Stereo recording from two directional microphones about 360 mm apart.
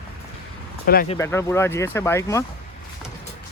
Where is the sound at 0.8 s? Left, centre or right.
Left.